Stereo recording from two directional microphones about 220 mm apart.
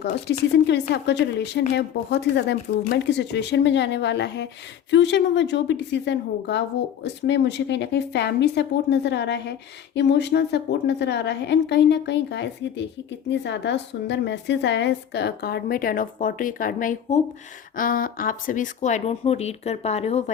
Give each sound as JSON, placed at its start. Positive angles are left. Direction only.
{"t": 0.0, "sound": "a woman's voice", "side_deg": 50}